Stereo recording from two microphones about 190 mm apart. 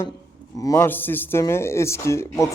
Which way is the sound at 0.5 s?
15° left (ahead or behind).